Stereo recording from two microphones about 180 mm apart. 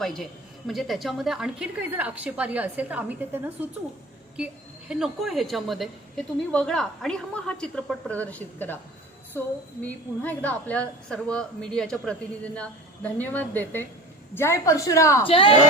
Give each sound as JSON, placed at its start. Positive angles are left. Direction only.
{"t": 0.0, "sound": "a woman's voice", "side_deg": 0}
{"t": 9.8, "sound": "a woman's voice", "side_deg": 10}
{"t": 15.3, "sound": "speech", "side_deg": 30}